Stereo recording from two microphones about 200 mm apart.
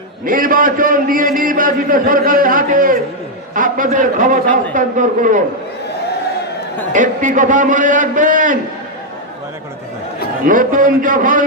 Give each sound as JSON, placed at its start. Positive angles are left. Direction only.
{"t": 0.3, "sound": "a man's voice", "side_deg": -45}
{"t": 6.9, "sound": "a man's voice", "side_deg": -40}
{"t": 10.4, "sound": "a man's voice", "side_deg": -45}